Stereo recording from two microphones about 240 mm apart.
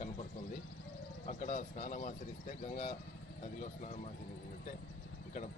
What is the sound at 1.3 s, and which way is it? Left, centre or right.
Speech, left.